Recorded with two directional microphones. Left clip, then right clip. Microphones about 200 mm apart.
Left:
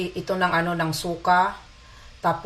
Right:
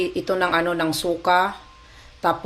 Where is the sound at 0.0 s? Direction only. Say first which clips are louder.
Right 2 dB; 40° right (ahead or behind).